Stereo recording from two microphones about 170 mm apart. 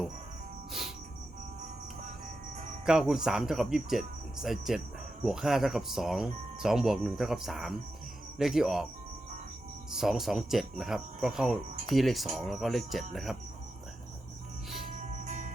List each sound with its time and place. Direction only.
0.7 s cricket: centre (ahead or behind)
2.8 s speech: 5° right (ahead or behind)
9.9 s speech: centre (ahead or behind)
15.2 s music: 45° right (ahead or behind)